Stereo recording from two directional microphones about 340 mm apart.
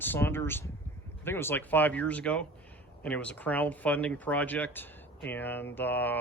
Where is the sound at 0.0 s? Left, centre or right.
Centre.